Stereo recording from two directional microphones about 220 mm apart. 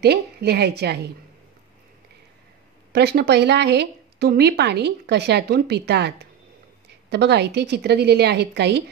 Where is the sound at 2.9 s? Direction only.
50° right (ahead or behind).